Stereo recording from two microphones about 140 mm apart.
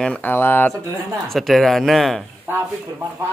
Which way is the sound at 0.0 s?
10° left (ahead or behind).